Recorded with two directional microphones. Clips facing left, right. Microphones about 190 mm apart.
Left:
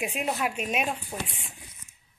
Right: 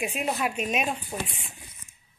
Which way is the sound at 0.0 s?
10° left (ahead or behind).